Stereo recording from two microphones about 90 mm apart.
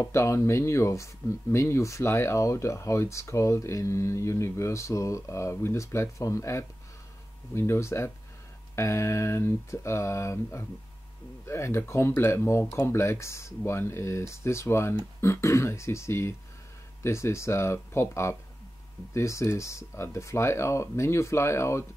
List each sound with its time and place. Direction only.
0.0 s speech: 35° left (ahead or behind)